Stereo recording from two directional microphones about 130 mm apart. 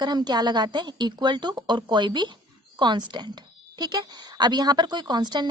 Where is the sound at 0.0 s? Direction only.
35° right (ahead or behind).